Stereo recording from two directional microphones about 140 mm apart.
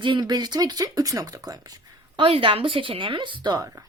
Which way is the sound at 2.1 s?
40° right (ahead or behind).